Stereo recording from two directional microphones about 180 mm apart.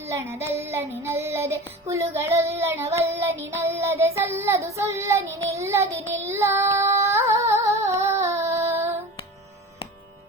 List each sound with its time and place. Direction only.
0.1 s child singing: 15° right (ahead or behind)
6.2 s music: 15° right (ahead or behind)